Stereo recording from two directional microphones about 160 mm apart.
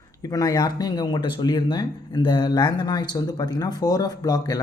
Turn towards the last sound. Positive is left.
turn(degrees=25)  # may be behind; listen again after turning